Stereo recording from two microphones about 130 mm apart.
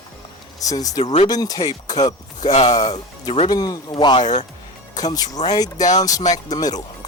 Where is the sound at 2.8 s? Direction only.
30° left (ahead or behind).